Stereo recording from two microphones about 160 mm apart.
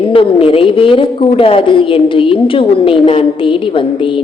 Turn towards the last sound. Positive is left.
turn(degrees=35)  # may be behind; listen again after turning